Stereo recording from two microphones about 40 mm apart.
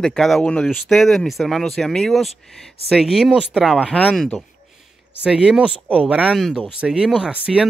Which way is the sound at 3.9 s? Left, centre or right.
Left.